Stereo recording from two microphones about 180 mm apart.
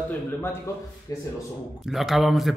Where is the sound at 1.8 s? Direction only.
Centre (ahead or behind).